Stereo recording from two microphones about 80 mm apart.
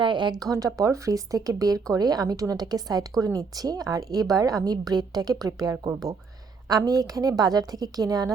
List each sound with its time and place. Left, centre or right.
0.0 s speech: right
0.3 s speech: right
5.7 s speech: right
6.7 s speech: right